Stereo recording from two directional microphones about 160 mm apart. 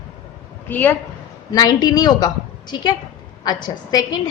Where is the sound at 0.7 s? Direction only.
10° left (ahead or behind).